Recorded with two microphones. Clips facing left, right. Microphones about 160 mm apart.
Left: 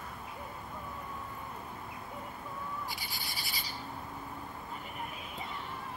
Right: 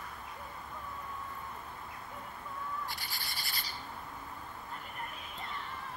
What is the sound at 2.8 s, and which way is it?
Bird, centre (ahead or behind).